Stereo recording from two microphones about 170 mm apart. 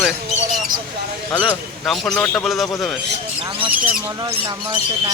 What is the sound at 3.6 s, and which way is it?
Speech, 10° right (ahead or behind).